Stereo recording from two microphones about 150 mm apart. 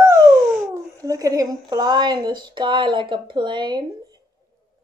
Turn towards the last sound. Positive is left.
turn(degrees=-30)  # may be behind; listen again after turning